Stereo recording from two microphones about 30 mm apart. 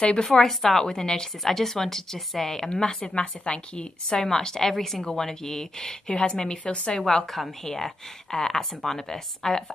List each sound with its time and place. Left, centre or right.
0.2 s speech: left
0.5 s speech: centre
1.4 s speech: centre
2.8 s speech: left
3.2 s speech: left; by 5.0 s centre
5.0 s speech: centre
6.6 s a woman's voice: left
6.9 s speech: left
7.2 s a woman's voice: centre